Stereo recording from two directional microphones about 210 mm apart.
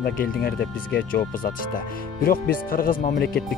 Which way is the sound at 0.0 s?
45° left (ahead or behind).